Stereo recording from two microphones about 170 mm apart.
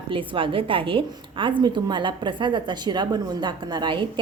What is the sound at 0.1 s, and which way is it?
A woman's voice, 30° right (ahead or behind).